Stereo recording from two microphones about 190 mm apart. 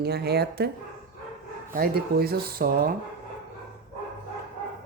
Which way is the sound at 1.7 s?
50° right (ahead or behind).